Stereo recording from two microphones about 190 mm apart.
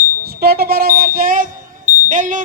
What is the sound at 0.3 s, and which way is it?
Speech, 55° right (ahead or behind).